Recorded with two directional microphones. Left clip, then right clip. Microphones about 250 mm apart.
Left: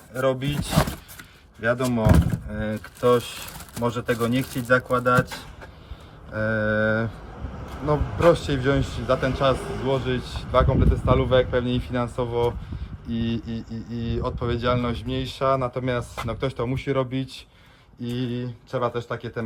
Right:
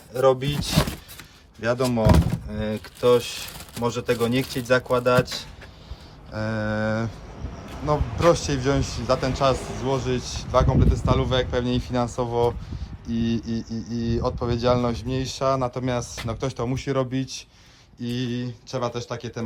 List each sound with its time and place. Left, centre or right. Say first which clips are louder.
0.1 s speech: right 4 dB; centre
0.7 s speech: left 2 dB; centre
6.3 s speech: left 4 dB; centre
9.6 s speech: left 2 dB; right
9.8 s speech: even; centre